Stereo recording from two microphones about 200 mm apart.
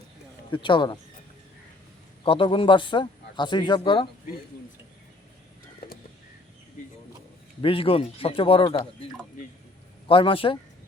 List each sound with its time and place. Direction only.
0.5 s a man's voice: 25° left (ahead or behind)
2.2 s a man's voice: 25° left (ahead or behind)
7.6 s a man's voice: 25° left (ahead or behind)
10.1 s a man's voice: 25° left (ahead or behind)